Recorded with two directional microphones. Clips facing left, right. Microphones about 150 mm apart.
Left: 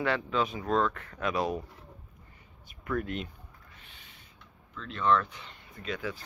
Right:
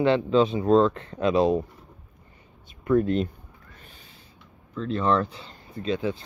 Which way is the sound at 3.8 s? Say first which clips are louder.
Right 5 dB; 40° right (ahead or behind).